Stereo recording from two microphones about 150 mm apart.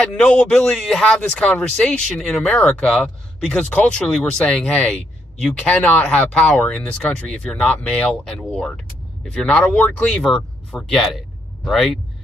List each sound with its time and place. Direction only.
0.0 s speech: 5° left (ahead or behind)